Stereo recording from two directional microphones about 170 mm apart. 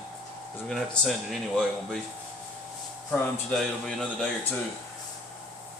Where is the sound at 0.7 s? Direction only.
Centre (ahead or behind).